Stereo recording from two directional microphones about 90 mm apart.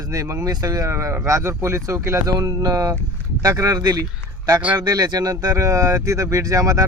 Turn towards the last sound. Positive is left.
turn(degrees=-40)  # may be behind; listen again after turning